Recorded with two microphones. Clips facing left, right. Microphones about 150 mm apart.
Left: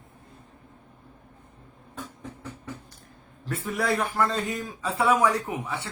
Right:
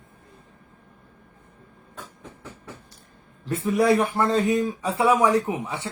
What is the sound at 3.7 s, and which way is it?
Speech, 20° right (ahead or behind).